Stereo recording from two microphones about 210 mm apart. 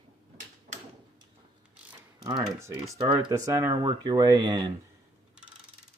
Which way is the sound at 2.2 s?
15° right (ahead or behind).